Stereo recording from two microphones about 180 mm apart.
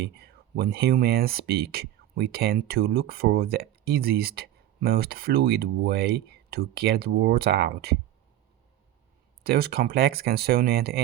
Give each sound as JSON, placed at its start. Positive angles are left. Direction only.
{"t": 0.0, "sound": "speech", "side_deg": -60}
{"t": 9.4, "sound": "speech", "side_deg": -60}